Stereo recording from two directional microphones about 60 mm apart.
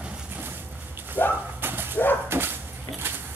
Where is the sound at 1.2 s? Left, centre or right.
Left.